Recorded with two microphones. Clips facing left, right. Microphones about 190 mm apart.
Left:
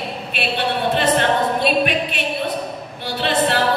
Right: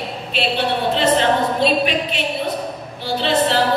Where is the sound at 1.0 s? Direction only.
55° left (ahead or behind).